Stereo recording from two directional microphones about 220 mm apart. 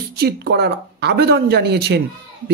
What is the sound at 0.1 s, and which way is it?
Speech, 45° right (ahead or behind).